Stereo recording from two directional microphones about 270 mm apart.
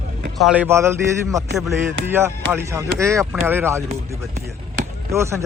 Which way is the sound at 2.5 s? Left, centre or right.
Centre.